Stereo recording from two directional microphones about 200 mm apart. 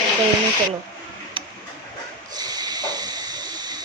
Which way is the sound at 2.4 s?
20° right (ahead or behind).